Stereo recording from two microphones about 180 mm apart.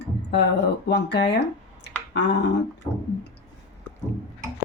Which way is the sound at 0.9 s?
70° left (ahead or behind).